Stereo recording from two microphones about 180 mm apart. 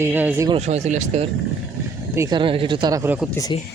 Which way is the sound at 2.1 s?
15° right (ahead or behind).